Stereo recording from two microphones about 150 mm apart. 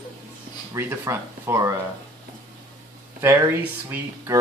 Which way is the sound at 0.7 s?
15° right (ahead or behind).